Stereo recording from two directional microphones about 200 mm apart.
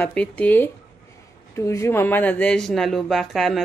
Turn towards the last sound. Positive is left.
turn(degrees=0)  # may be behind; listen again after turning